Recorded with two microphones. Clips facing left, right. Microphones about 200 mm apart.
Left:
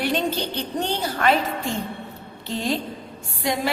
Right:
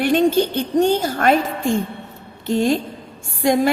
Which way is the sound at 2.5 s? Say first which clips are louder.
Right 8 dB; 50° right (ahead or behind).